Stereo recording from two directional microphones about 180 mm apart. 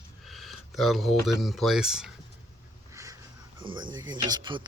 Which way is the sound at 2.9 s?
15° right (ahead or behind).